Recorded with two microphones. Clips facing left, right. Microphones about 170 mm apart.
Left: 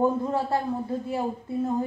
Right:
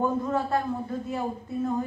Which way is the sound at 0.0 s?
30° left (ahead or behind).